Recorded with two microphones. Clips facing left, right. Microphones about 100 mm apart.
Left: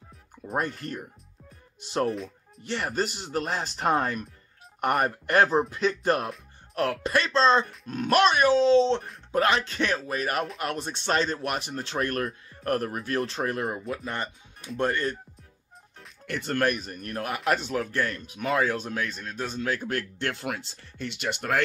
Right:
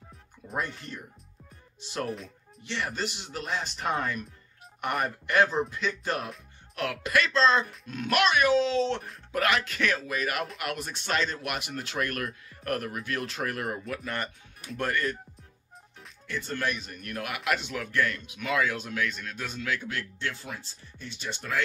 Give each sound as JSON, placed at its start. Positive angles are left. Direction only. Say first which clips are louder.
{"t": 0.4, "sound": "music", "louder": "left 8 dB", "side_deg": 45}
{"t": 0.8, "sound": "speech", "louder": "left 6 dB", "side_deg": 55}
{"t": 2.6, "sound": "speech", "louder": "left 4 dB", "side_deg": 45}
{"t": 16.3, "sound": "speech", "louder": "left 5 dB", "side_deg": 60}